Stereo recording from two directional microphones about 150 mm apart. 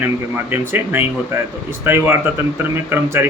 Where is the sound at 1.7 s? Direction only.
15° right (ahead or behind).